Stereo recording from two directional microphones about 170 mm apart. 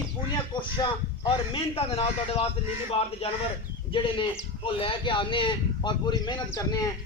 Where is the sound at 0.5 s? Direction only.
30° left (ahead or behind).